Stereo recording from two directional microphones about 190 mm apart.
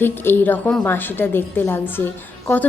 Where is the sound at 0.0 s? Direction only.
10° left (ahead or behind).